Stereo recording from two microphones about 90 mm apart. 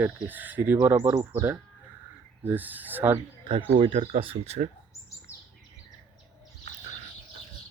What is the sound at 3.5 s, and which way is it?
Speech, 90° right.